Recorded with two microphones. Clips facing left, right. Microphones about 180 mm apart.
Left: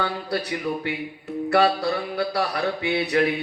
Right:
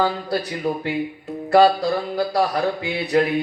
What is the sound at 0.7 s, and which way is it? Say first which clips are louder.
Speech: right 5 dB; 50° right (ahead or behind).